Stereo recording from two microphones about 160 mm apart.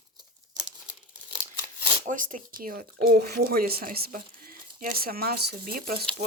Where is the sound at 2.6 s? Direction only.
65° right (ahead or behind).